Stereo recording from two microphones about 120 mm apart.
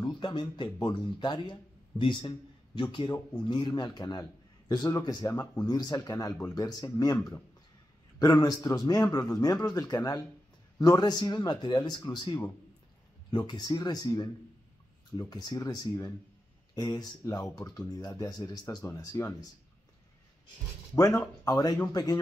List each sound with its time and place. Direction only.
0.2 s speech: 40° left (ahead or behind)
20.9 s speech: 30° left (ahead or behind)